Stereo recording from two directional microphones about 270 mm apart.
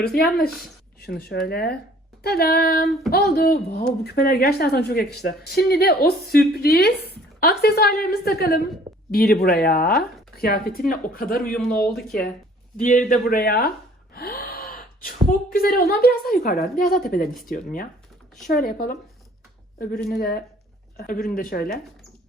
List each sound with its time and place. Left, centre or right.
0.0 s a woman's voice: left
2.8 s speech: centre
3.1 s a woman's voice: left
11.5 s speech: centre
12.7 s a woman's voice: left
20.1 s a woman's voice: left